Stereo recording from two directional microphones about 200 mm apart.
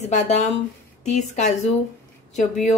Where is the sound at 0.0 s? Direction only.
35° left (ahead or behind).